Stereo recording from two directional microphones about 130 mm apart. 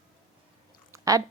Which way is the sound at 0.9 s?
25° right (ahead or behind).